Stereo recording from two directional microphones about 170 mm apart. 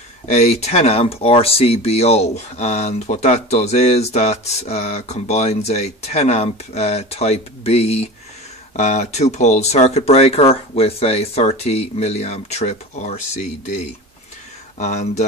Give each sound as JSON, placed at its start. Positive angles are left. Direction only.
{"t": 0.3, "sound": "speech", "side_deg": 40}